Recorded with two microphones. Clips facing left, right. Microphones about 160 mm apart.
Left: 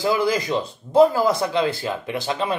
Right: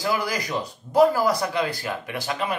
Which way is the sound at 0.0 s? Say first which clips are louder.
Left 5 dB; 25° left (ahead or behind).